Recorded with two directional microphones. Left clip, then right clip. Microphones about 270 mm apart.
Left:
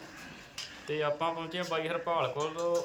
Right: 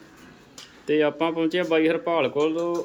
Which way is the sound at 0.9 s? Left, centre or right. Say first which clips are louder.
Right 9 dB; right.